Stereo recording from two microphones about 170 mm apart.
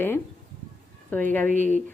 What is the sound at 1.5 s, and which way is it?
Speech, 50° right (ahead or behind).